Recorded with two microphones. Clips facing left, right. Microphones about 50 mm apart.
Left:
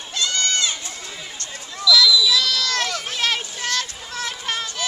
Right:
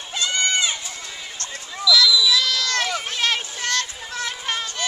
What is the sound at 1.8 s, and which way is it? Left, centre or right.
Run, centre.